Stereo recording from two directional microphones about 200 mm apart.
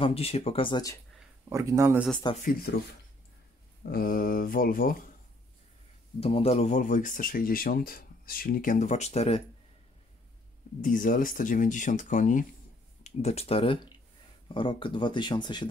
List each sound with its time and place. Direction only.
0.0 s speech: 30° left (ahead or behind)
1.5 s speech: 15° right (ahead or behind)
2.4 s mantra: 45° left (ahead or behind)
3.8 s mantra: 45° left (ahead or behind)
6.1 s speech: 30° left (ahead or behind)
10.8 s speech: 40° left (ahead or behind); by 15.7 s 20° left (ahead or behind)